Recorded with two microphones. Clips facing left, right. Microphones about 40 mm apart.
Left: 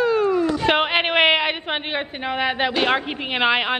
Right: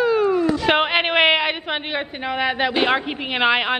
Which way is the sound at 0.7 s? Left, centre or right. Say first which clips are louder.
Right 1 dB; centre.